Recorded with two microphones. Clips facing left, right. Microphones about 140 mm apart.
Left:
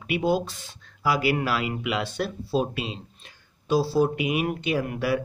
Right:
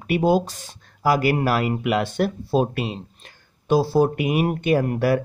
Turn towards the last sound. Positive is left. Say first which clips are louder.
# right 5 dB
turn(degrees=-50)  # may be behind; listen again after turning